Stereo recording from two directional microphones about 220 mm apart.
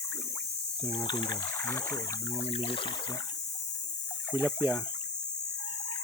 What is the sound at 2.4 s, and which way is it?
Speech, 25° left (ahead or behind).